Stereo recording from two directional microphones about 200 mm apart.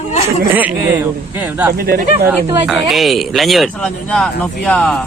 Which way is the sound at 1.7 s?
50° right (ahead or behind).